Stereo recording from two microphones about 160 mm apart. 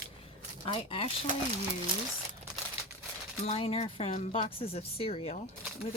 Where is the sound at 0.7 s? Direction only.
35° left (ahead or behind).